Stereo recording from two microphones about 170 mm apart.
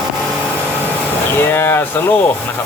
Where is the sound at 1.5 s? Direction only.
10° left (ahead or behind).